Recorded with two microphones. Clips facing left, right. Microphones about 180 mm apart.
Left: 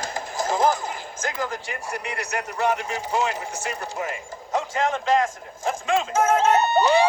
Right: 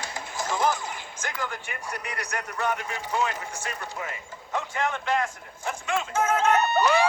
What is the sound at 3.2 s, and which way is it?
Speech, 75° left (ahead or behind).